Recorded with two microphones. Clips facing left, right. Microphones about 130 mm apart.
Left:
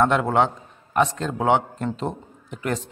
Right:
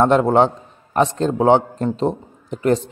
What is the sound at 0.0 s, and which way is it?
A man's voice, 35° right (ahead or behind).